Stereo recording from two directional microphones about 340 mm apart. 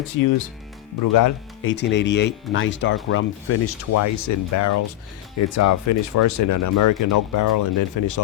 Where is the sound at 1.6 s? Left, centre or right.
Left.